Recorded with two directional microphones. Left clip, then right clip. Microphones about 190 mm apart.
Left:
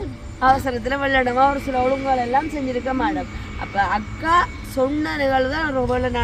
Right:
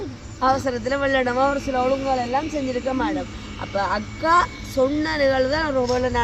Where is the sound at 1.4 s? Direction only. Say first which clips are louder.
Left 3 dB; 5° left (ahead or behind).